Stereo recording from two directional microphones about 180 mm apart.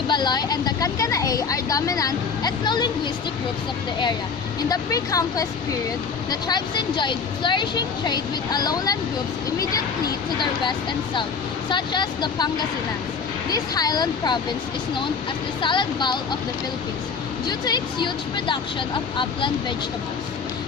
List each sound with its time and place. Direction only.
0.1 s speech: 25° left (ahead or behind)
4.7 s speech: 20° left (ahead or behind)
6.5 s speech: 25° left (ahead or behind)
10.3 s speech: 25° left (ahead or behind)
15.6 s speech: 25° left (ahead or behind)
17.4 s speech: 25° left (ahead or behind)